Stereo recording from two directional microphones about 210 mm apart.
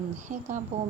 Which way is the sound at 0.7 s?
30° right (ahead or behind).